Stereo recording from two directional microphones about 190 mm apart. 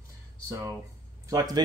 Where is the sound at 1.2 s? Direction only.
20° right (ahead or behind).